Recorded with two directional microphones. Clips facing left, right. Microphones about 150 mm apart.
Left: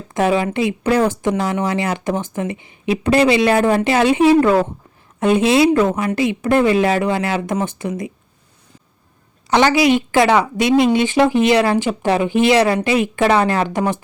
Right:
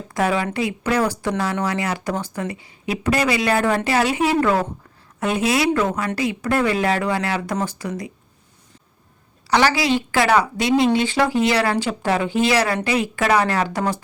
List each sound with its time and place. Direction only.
0.1 s speech: 25° left (ahead or behind)
9.5 s speech: 20° left (ahead or behind)